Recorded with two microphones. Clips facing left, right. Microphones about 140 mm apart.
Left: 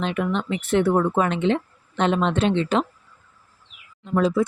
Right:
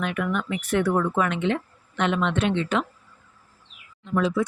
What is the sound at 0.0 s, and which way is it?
Speech, 25° left (ahead or behind).